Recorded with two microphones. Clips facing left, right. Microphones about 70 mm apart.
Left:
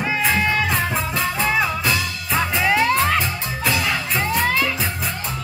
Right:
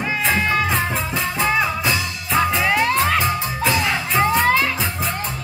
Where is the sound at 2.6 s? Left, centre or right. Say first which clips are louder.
Left 1 dB; centre.